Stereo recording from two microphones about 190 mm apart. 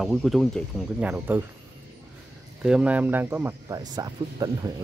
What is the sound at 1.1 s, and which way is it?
Speech, 10° right (ahead or behind).